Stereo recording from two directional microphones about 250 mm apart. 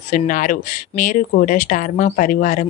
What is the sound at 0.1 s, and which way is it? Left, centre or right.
Speech, left.